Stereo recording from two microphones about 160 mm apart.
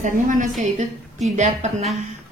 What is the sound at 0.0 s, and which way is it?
A woman's voice, 50° right (ahead or behind).